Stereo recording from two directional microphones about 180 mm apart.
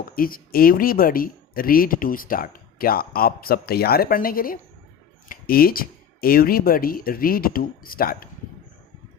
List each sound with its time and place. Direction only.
0.2 s speech: 55° left (ahead or behind)